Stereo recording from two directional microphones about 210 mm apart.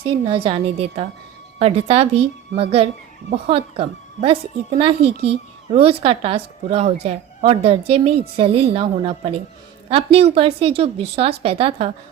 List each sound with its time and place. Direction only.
0.0 s a woman's voice: 25° right (ahead or behind)